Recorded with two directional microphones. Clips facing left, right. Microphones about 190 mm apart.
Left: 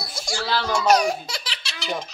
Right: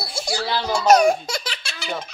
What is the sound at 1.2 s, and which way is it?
Laughter, 45° right (ahead or behind).